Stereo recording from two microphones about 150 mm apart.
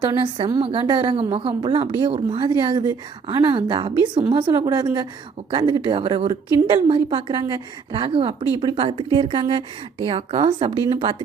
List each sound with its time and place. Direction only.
0.0 s a woman's voice: 30° right (ahead or behind)